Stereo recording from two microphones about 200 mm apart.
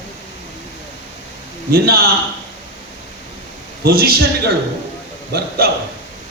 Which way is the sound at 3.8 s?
50° right (ahead or behind).